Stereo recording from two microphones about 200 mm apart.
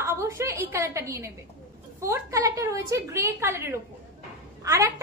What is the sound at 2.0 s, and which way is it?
A woman's voice, 15° right (ahead or behind).